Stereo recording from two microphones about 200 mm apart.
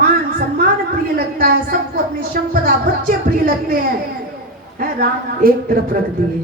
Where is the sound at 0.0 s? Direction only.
45° right (ahead or behind).